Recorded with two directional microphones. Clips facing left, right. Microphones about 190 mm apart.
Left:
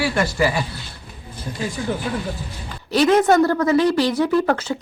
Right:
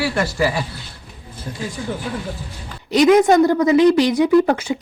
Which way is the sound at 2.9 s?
15° right (ahead or behind).